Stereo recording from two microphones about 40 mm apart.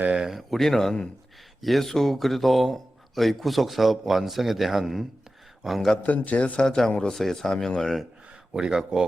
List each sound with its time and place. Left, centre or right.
0.2 s speech: centre
0.5 s a man's voice: centre
6.0 s a man's voice: left
6.6 s speech: centre
8.5 s speech: centre